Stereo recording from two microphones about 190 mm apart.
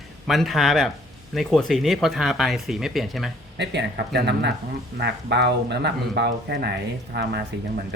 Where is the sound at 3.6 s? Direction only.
60° right (ahead or behind).